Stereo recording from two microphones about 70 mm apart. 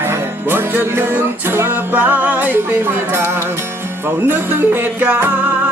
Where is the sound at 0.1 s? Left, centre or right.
Right.